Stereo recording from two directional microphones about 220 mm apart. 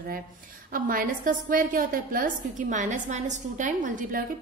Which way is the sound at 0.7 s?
40° right (ahead or behind).